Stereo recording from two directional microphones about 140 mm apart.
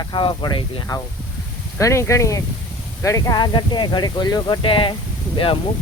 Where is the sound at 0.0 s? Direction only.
30° left (ahead or behind).